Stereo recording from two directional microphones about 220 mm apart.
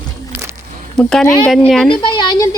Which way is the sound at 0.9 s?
Centre (ahead or behind).